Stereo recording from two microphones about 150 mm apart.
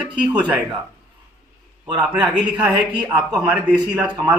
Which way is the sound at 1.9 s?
10° right (ahead or behind).